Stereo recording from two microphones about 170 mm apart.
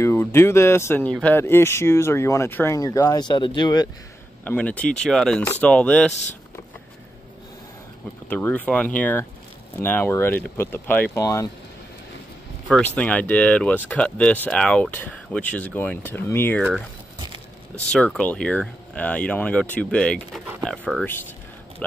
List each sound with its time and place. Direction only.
0.0 s speech: 15° left (ahead or behind)
4.5 s speech: 10° left (ahead or behind)
8.3 s speech: 10° left (ahead or behind)
12.6 s speech: 5° left (ahead or behind)
17.9 s speech: 5° left (ahead or behind)